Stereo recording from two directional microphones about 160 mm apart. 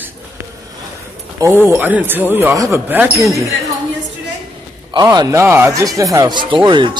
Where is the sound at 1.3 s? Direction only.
15° right (ahead or behind).